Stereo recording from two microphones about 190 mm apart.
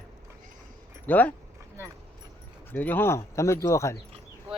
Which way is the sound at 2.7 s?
10° left (ahead or behind).